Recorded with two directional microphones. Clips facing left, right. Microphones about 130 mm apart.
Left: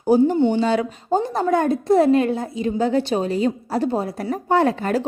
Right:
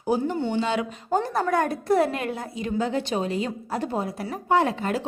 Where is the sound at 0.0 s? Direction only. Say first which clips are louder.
Left 9 dB; 35° left (ahead or behind).